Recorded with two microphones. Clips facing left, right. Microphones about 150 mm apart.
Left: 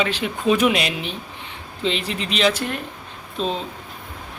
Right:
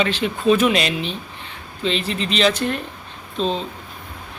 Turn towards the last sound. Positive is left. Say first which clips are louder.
# right 2 dB
turn(degrees=10)  # may be behind; listen again after turning